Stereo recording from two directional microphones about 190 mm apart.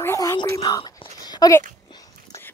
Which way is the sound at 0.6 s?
20° left (ahead or behind).